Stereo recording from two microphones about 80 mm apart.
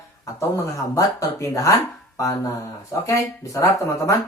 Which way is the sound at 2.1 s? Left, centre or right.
Left.